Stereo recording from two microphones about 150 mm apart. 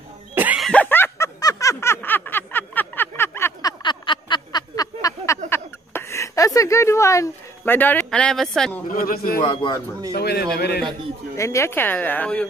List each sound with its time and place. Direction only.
0.3 s a sound: 10° right (ahead or behind)
0.6 s snicker: 5° left (ahead or behind)
3.8 s a sound: 30° left (ahead or behind); by 8.8 s 5° left (ahead or behind)
8.9 s a man's voice: 70° left (ahead or behind)
9.4 s a man's voice: 40° left (ahead or behind)
10.1 s a man's voice: 90° left
11.3 s speech: 20° left (ahead or behind)